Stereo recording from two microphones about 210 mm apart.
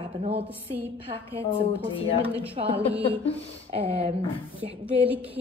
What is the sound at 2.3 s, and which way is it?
Speech, 25° right (ahead or behind).